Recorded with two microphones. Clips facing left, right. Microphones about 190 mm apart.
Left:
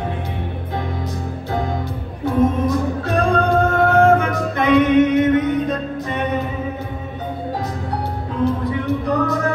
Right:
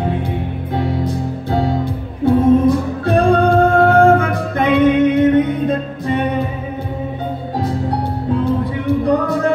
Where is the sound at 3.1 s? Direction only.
30° right (ahead or behind).